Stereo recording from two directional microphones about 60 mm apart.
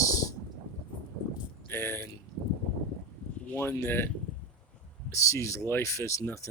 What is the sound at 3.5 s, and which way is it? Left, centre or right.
Speech, left.